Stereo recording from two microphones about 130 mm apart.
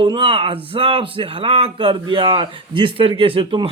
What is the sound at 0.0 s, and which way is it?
Speech, 40° right (ahead or behind).